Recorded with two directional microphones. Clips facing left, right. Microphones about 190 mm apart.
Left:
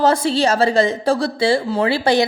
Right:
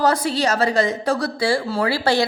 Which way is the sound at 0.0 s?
25° left (ahead or behind).